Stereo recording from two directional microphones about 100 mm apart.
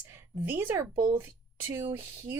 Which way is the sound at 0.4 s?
20° right (ahead or behind).